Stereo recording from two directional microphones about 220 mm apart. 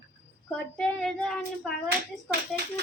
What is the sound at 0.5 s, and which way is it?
Child singing, 5° left (ahead or behind).